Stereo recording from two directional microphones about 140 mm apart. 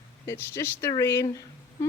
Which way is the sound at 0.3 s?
20° left (ahead or behind).